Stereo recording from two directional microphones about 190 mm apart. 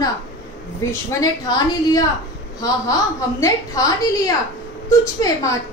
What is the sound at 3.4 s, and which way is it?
A woman's voice, 15° left (ahead or behind).